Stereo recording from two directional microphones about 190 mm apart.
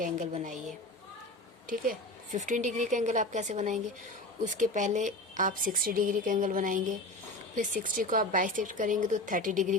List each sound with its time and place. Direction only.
0.4 s a woman's voice: 40° right (ahead or behind)
1.7 s a woman's voice: 45° right (ahead or behind)